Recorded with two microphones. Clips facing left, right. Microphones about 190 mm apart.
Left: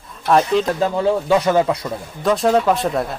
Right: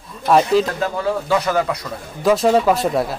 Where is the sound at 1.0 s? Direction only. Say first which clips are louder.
Left 2 dB; 25° left (ahead or behind).